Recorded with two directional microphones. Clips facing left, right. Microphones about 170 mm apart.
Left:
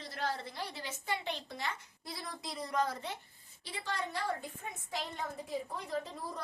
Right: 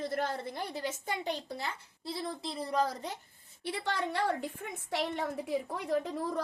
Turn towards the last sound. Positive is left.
turn(degrees=-70)  # may be behind; listen again after turning